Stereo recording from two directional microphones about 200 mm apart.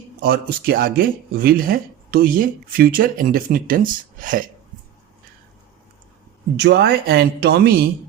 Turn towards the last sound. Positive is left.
turn(degrees=-50)  # may be behind; listen again after turning